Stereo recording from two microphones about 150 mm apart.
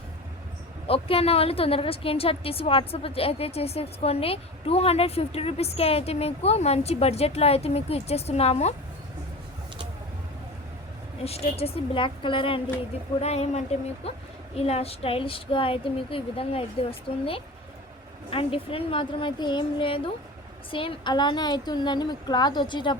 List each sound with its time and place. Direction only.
0.9 s a woman's voice: 40° left (ahead or behind)
11.2 s a woman's voice: 40° left (ahead or behind)